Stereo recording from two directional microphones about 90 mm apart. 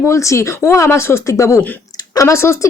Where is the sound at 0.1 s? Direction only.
35° left (ahead or behind).